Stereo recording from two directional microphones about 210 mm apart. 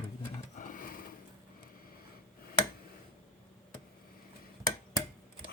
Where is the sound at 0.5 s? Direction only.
40° left (ahead or behind).